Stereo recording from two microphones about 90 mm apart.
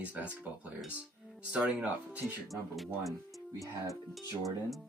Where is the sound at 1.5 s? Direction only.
15° right (ahead or behind).